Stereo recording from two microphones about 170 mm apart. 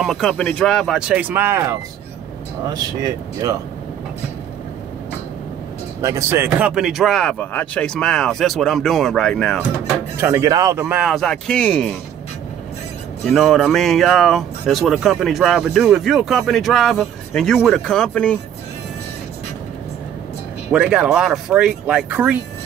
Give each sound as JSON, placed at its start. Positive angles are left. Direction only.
{"t": 0.0, "sound": "speech", "side_deg": 0}
{"t": 6.0, "sound": "speech", "side_deg": -15}
{"t": 10.2, "sound": "speech", "side_deg": -20}
{"t": 11.0, "sound": "speech", "side_deg": 0}
{"t": 13.3, "sound": "speech", "side_deg": 0}
{"t": 20.7, "sound": "speech", "side_deg": -5}